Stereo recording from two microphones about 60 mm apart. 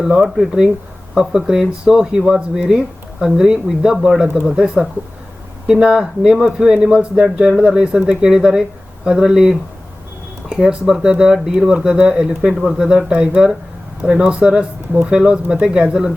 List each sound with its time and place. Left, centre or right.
0.0 s speech: centre
12.5 s speech: centre